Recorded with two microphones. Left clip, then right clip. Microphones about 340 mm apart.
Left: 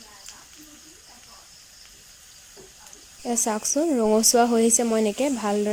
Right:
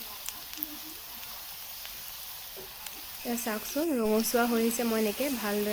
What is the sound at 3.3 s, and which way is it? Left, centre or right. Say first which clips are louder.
Speech: left 9 dB; centre.